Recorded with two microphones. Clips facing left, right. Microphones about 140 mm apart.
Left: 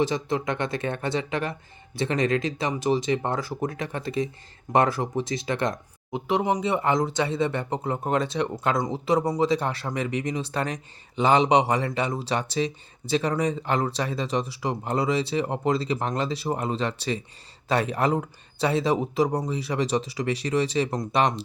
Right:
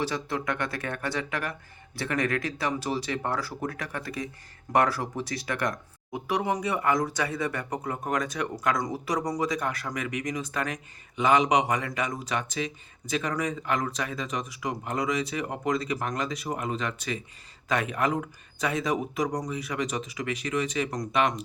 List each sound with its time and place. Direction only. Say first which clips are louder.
0.0 s speech: left 5 dB; 20° left (ahead or behind)